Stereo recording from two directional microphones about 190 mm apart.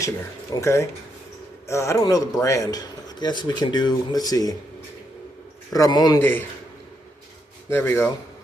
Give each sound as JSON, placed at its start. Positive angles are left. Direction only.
{"t": 0.5, "sound": "speech", "side_deg": 15}
{"t": 5.7, "sound": "speech", "side_deg": 20}
{"t": 7.7, "sound": "speech", "side_deg": 15}